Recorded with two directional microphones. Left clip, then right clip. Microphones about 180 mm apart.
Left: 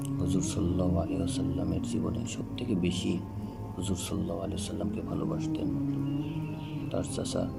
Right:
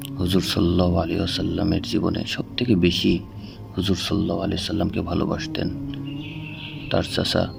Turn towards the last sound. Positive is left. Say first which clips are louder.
# right 10 dB
turn(degrees=-50)  # may be behind; listen again after turning